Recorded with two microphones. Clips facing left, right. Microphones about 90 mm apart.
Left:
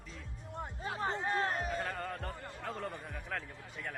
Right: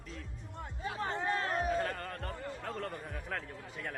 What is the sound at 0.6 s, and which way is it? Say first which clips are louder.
Speech: even; 30° left (ahead or behind).